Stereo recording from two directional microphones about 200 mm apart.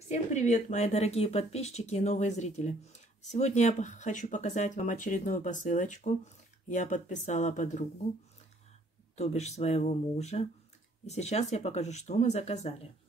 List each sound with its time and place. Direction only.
0.1 s speech: 35° left (ahead or behind)
9.1 s speech: 35° left (ahead or behind)